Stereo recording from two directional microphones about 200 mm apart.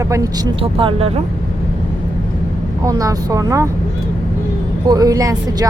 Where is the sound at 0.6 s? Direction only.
25° right (ahead or behind).